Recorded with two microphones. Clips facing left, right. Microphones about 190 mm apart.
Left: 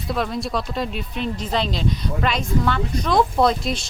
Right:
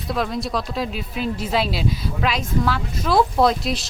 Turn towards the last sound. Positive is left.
turn(degrees=0)  # may be behind; listen again after turning